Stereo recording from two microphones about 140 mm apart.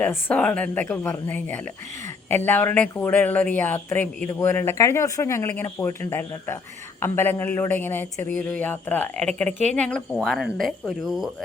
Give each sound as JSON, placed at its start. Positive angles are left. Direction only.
{"t": 0.0, "sound": "speech", "side_deg": 15}